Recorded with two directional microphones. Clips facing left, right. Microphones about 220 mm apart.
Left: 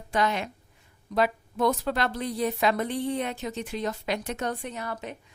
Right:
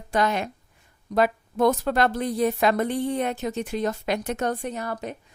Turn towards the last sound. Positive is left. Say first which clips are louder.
# right 4 dB
turn(degrees=-40)  # may be behind; listen again after turning